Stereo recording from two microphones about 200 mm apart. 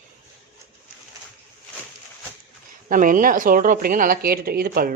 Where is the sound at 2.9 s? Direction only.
40° right (ahead or behind).